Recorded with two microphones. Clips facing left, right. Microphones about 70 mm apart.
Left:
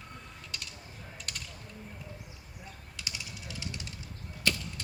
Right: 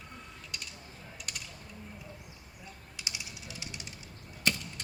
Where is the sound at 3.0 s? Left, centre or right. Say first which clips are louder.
Left 1 dB; centre.